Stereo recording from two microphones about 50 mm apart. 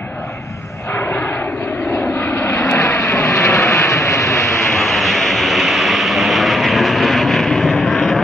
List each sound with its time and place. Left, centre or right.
2.3 s vehicle: left
4.7 s vehicle: centre